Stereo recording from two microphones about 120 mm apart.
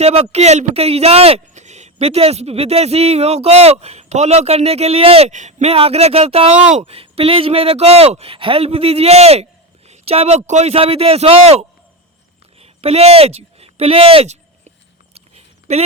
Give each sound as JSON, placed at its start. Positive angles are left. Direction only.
{"t": 0.0, "sound": "speech", "side_deg": -60}
{"t": 5.3, "sound": "speech", "side_deg": -85}
{"t": 12.5, "sound": "a sound", "side_deg": -55}